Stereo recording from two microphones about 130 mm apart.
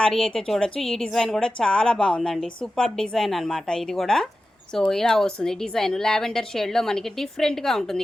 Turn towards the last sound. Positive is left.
turn(degrees=5)  # may be behind; listen again after turning